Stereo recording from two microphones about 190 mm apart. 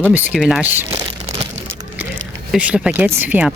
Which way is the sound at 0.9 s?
25° right (ahead or behind).